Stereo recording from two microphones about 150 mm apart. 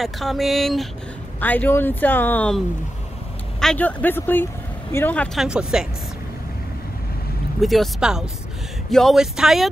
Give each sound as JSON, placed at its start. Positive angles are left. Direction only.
{"t": 0.0, "sound": "speech", "side_deg": 0}
{"t": 1.4, "sound": "speech", "side_deg": 10}
{"t": 3.6, "sound": "speech", "side_deg": 10}
{"t": 5.4, "sound": "speech", "side_deg": -5}
{"t": 7.6, "sound": "speech", "side_deg": 0}